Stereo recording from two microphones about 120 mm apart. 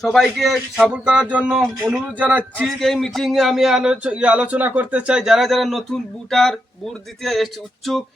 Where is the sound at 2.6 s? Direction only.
Centre (ahead or behind).